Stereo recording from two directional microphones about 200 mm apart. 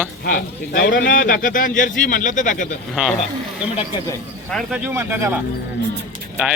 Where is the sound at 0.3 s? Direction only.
45° left (ahead or behind).